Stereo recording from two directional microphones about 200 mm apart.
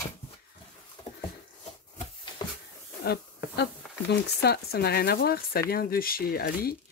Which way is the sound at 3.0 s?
55° left (ahead or behind).